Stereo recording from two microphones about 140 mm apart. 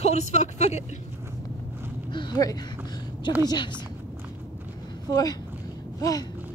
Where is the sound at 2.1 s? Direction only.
30° left (ahead or behind).